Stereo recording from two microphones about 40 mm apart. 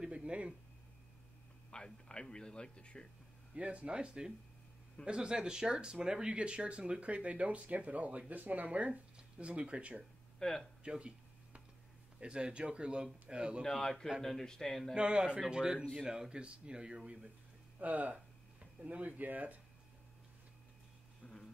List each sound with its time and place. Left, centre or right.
0.0 s a sound: right
1.7 s speech: left
3.5 s speech: right
10.4 s speech: centre
10.8 s a sound: right
12.2 s speech: right
13.7 s speech: centre
15.0 s speech: right
17.7 s speech: right
18.1 s speech: right
21.2 s a sound: left